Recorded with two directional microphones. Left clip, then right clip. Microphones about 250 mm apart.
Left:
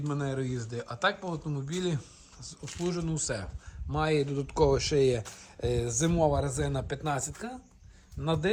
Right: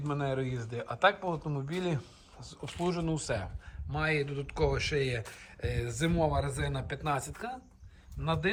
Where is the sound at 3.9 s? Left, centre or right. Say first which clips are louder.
Left 3 dB; centre.